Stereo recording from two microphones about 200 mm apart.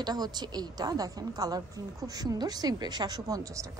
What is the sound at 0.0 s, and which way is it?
A woman's voice, 20° right (ahead or behind).